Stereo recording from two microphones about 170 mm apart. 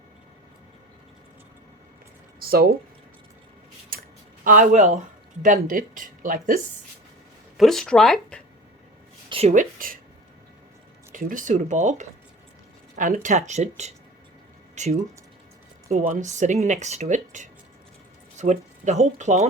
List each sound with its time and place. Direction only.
2.4 s speech: 65° right (ahead or behind)
3.9 s a sound: 60° right (ahead or behind)
4.4 s speech: 50° right (ahead or behind)
7.5 s speech: centre (ahead or behind)
9.3 s speech: 40° right (ahead or behind)
11.1 s speech: 50° right (ahead or behind)